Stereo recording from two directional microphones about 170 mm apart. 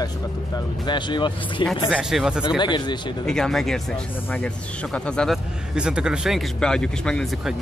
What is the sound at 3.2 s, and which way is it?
Speech, 5° left (ahead or behind).